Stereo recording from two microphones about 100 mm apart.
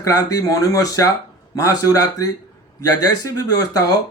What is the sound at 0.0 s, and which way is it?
Speech, 35° left (ahead or behind).